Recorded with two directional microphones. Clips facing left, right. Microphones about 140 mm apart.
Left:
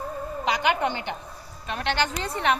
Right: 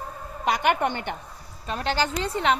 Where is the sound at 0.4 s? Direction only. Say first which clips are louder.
Right 2 dB; 50° right (ahead or behind).